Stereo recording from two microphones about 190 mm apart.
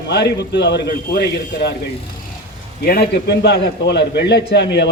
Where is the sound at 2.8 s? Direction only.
55° left (ahead or behind).